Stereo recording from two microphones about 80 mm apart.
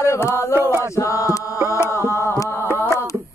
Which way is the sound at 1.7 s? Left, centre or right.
Left.